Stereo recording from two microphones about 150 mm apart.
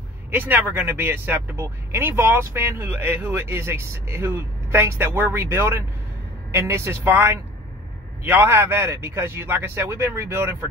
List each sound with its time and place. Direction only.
0.3 s speech: 15° right (ahead or behind)